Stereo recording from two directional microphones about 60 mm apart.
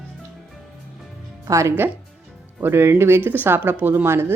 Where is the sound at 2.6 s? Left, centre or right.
Right.